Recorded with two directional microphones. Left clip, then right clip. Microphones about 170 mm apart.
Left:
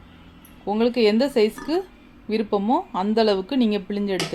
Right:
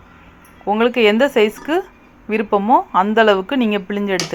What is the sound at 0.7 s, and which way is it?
A woman's voice, 10° right (ahead or behind).